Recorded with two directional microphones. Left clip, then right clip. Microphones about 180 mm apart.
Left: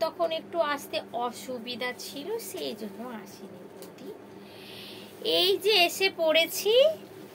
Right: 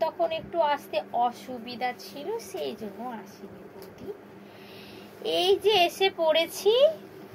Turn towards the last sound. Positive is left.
turn(degrees=15)  # may be behind; listen again after turning